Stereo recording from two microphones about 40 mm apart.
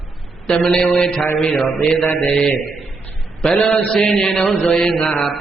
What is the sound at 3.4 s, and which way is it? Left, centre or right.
Mantra, centre.